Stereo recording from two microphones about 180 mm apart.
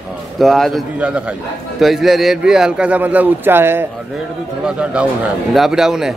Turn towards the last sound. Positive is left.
turn(degrees=-5)  # may be behind; listen again after turning